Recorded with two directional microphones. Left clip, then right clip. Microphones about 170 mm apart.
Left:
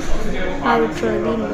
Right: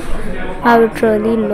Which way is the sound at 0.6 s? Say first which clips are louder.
Right 7 dB; 35° right (ahead or behind).